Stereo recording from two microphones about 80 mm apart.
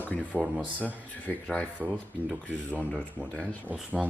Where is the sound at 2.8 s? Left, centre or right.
Centre.